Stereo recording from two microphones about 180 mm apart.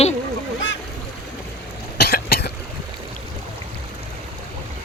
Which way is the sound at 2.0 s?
60° left (ahead or behind).